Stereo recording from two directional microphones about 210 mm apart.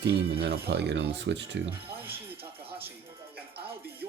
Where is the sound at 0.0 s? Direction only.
50° right (ahead or behind).